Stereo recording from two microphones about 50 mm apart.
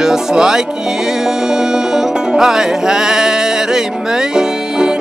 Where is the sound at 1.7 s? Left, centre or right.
Centre.